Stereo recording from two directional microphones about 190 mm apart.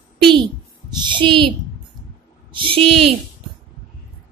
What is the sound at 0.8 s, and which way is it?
Speech, 25° right (ahead or behind).